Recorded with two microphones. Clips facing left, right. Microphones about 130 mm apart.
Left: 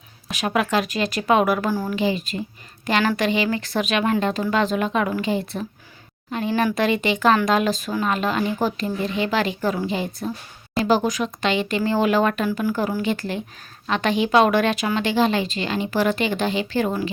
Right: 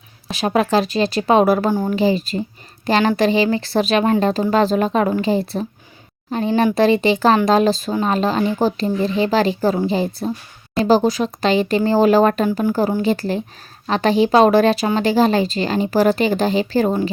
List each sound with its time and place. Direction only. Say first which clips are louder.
0.3 s a woman's voice: right 5 dB; 30° right (ahead or behind)
2.0 s speech: right 5 dB; 35° right (ahead or behind)